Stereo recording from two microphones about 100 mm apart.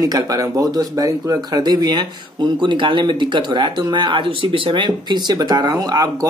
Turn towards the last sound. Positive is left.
turn(degrees=-40)  # may be behind; listen again after turning